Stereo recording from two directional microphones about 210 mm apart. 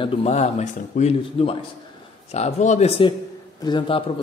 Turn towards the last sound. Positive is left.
turn(degrees=20)  # may be behind; listen again after turning